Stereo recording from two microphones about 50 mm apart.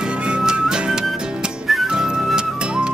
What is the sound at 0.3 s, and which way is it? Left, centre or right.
Music, centre.